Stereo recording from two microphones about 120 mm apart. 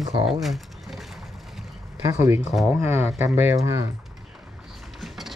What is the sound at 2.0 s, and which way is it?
Speech, 20° right (ahead or behind).